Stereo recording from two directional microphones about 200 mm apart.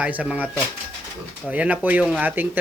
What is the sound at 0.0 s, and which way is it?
Speech, 5° right (ahead or behind).